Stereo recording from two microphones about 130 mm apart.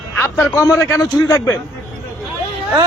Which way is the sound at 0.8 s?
20° left (ahead or behind).